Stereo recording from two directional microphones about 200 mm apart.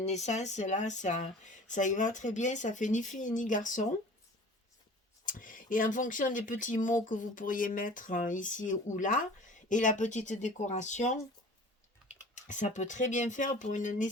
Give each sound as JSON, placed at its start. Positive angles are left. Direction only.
{"t": 0.0, "sound": "speech", "side_deg": 35}
{"t": 5.2, "sound": "speech", "side_deg": 40}
{"t": 12.3, "sound": "speech", "side_deg": 35}